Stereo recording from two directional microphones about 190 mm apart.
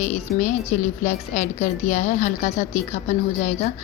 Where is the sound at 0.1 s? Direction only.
40° left (ahead or behind).